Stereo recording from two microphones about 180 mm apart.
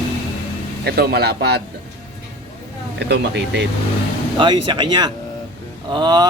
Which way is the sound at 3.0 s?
75° right (ahead or behind).